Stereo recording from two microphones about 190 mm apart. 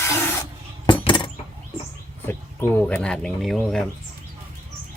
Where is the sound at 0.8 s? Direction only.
25° left (ahead or behind).